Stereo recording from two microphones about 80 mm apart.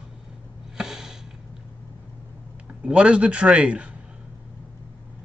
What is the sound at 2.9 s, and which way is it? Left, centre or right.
Speech, centre.